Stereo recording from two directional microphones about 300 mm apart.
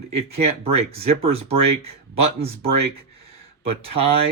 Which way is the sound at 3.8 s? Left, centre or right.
Centre.